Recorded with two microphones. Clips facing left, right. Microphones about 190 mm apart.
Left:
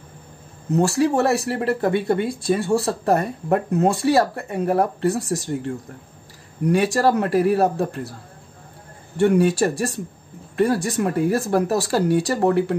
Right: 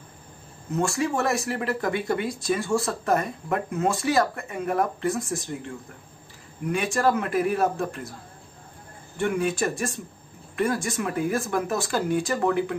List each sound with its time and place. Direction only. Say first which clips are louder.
0.7 s speech: left 7 dB; 35° left (ahead or behind)
6.6 s speech: left 6 dB; 35° left (ahead or behind)
9.1 s speech: left 8 dB; 35° left (ahead or behind)